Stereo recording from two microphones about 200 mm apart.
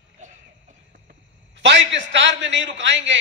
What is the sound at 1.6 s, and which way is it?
A man's voice, 65° right (ahead or behind).